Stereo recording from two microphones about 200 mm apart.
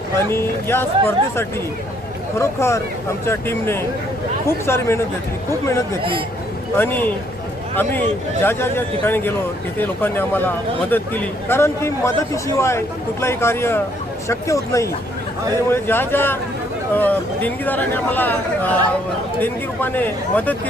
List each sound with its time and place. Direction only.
0.2 s a man's voice: 10° left (ahead or behind)
6.0 s speech: 25° right (ahead or behind)
6.7 s a man's voice: 10° left (ahead or behind)
8.4 s a man's voice: 10° left (ahead or behind)